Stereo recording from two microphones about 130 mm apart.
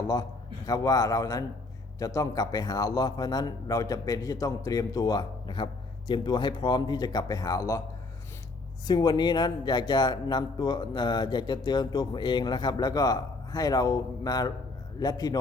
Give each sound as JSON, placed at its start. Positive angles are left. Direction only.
{"t": 0.1, "sound": "a man's voice", "side_deg": 30}
{"t": 8.9, "sound": "a man's voice", "side_deg": 30}